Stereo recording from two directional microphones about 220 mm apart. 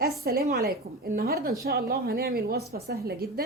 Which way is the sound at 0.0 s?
45° right (ahead or behind).